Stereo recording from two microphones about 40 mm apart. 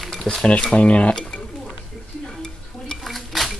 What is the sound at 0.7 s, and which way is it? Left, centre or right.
Speech, left.